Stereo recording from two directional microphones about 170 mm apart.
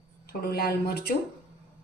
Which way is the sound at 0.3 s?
65° left (ahead or behind).